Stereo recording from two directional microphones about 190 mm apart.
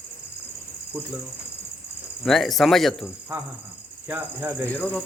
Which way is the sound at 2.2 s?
Centre (ahead or behind).